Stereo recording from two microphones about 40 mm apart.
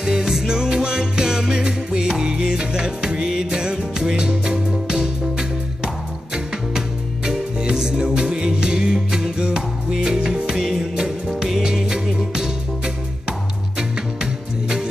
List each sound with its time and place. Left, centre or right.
0.0 s music: centre
7.6 s music: centre